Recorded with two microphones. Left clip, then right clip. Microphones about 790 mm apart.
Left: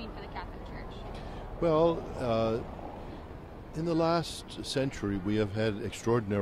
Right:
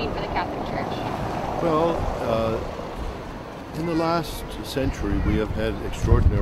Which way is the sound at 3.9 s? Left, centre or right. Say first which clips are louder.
Right 5 dB; left.